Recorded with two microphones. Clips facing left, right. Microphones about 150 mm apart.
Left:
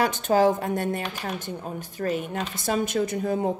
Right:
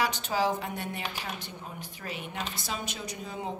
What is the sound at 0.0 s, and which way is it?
Speech, 50° left (ahead or behind).